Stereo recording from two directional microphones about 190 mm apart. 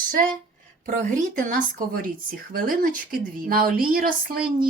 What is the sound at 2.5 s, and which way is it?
Speech, 50° right (ahead or behind).